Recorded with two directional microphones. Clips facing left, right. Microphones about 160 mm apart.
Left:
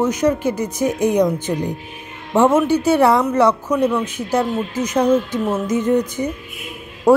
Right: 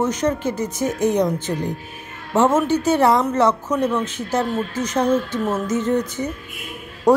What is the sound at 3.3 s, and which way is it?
Speech, 10° left (ahead or behind).